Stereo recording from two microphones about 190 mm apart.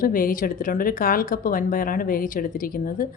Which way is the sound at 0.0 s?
45° left (ahead or behind).